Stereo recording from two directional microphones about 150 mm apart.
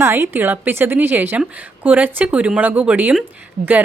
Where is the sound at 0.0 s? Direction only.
15° right (ahead or behind).